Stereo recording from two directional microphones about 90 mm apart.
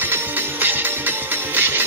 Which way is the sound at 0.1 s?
20° right (ahead or behind).